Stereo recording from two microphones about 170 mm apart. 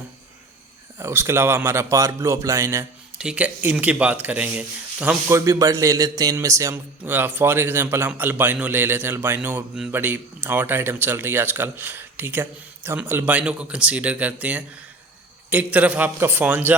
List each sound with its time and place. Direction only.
0.9 s a man's voice: 15° right (ahead or behind)
3.2 s a man's voice: 5° right (ahead or behind)
5.5 s a man's voice: 20° right (ahead or behind)